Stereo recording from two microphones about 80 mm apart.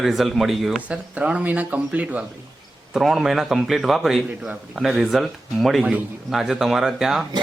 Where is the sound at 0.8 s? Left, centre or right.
Centre.